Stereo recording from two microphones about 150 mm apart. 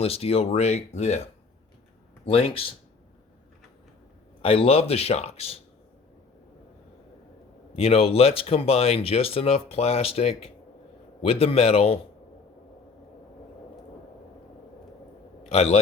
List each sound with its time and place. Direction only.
0.0 s speech: 40° left (ahead or behind)
2.2 s speech: 40° left (ahead or behind)
4.4 s speech: 40° left (ahead or behind)
7.7 s speech: 40° left (ahead or behind)
15.4 s a man's voice: 40° left (ahead or behind)